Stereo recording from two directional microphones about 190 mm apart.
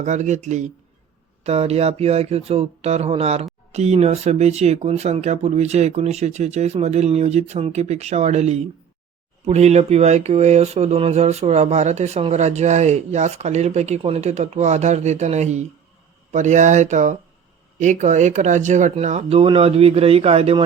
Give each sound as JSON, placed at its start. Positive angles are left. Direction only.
{"t": 0.0, "sound": "speech", "side_deg": -40}